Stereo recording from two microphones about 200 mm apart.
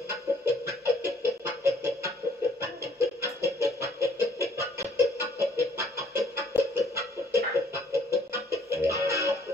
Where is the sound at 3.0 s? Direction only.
15° right (ahead or behind).